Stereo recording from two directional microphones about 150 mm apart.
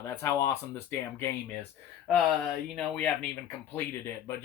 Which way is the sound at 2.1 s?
Centre (ahead or behind).